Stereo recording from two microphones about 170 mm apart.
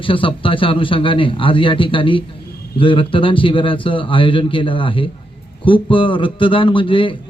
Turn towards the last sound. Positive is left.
turn(degrees=30)  # may be behind; listen again after turning